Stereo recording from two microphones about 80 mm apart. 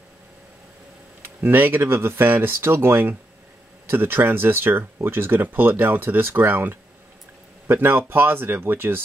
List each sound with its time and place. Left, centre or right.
1.2 s speech: right